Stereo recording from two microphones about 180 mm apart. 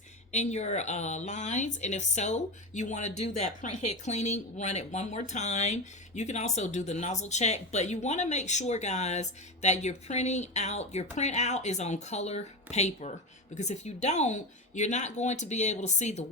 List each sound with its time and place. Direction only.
0.3 s speech: 40° left (ahead or behind)